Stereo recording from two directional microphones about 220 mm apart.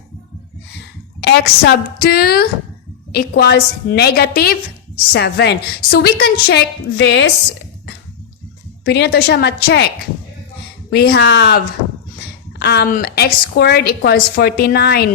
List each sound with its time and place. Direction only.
1.2 s a woman's voice: 50° left (ahead or behind)
8.8 s a woman's voice: 50° left (ahead or behind)
10.9 s a woman's voice: 45° left (ahead or behind)